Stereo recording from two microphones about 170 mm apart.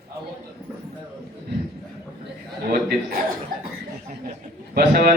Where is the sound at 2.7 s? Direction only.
65° right (ahead or behind).